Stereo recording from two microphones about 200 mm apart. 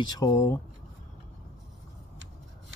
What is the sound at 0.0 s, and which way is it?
Speech, 20° left (ahead or behind).